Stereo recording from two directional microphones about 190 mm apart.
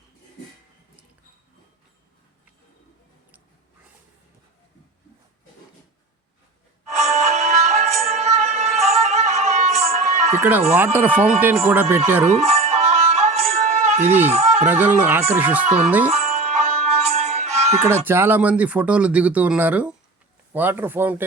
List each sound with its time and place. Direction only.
6.9 s music: 35° right (ahead or behind)
10.8 s speech: 10° right (ahead or behind)
12.3 s music: 35° right (ahead or behind)
14.0 s speech: 10° right (ahead or behind)
14.3 s speech: 35° right (ahead or behind)
14.6 s speech: 10° right (ahead or behind)
15.6 s speech: 35° right (ahead or behind)
16.0 s music: 35° right (ahead or behind)
17.8 s speech: 10° right (ahead or behind)